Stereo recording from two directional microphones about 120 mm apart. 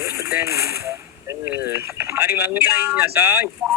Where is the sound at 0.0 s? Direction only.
25° right (ahead or behind).